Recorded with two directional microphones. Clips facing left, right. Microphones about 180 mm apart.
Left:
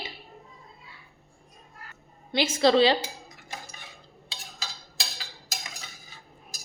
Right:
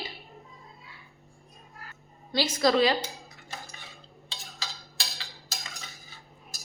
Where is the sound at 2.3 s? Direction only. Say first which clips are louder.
Left 3 dB; 25° left (ahead or behind).